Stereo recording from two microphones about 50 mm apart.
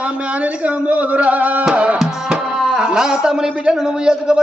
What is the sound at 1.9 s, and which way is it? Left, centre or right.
Speech, centre.